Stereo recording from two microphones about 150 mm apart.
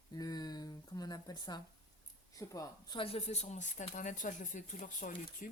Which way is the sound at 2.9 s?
40° left (ahead or behind).